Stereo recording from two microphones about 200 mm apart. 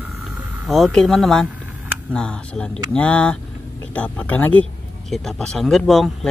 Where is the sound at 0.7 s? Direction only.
Centre (ahead or behind).